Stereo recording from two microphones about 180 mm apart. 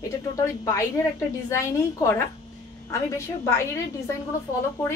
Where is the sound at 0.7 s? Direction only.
15° left (ahead or behind).